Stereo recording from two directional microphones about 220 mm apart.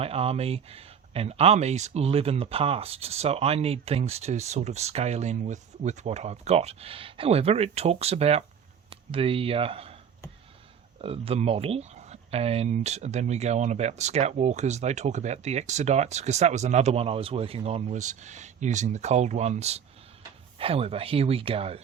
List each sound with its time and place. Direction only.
0.0 s speech: 25° right (ahead or behind)
11.0 s speech: 25° right (ahead or behind)